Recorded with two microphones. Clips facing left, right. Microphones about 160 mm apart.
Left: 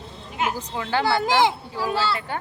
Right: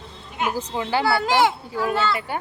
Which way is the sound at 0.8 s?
10° right (ahead or behind).